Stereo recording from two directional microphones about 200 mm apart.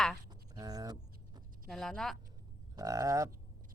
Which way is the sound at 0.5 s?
20° right (ahead or behind).